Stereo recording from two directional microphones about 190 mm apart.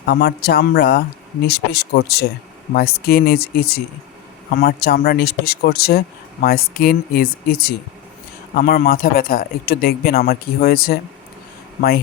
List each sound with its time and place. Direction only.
0.0 s speech: 60° left (ahead or behind)